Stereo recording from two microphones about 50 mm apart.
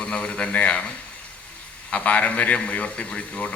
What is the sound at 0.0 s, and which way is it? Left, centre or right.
Speech, left.